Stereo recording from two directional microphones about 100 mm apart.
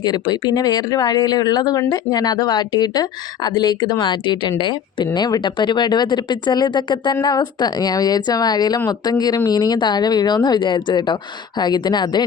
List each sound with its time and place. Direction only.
0.0 s speech: 45° left (ahead or behind)